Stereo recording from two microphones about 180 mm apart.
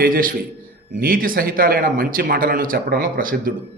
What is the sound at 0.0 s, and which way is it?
Speech, 50° right (ahead or behind).